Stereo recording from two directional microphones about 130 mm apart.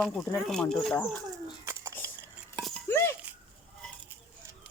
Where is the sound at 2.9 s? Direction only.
20° left (ahead or behind).